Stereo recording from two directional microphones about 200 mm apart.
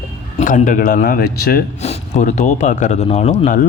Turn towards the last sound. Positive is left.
turn(degrees=40)  # may be behind; listen again after turning